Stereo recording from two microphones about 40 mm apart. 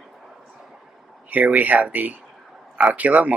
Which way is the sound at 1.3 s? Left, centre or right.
Right.